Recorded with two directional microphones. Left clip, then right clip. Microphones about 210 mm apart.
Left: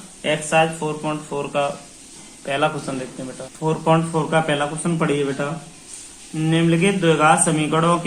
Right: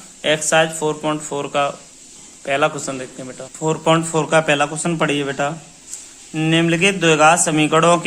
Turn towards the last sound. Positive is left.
turn(degrees=-55)  # may be behind; listen again after turning